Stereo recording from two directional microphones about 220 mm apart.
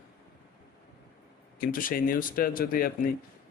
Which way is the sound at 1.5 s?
40° left (ahead or behind).